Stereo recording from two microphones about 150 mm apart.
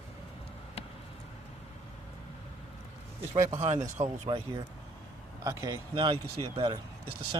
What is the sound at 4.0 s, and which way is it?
Speech, 45° right (ahead or behind).